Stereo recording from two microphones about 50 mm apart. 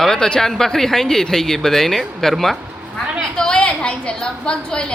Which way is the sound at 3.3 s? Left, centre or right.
Centre.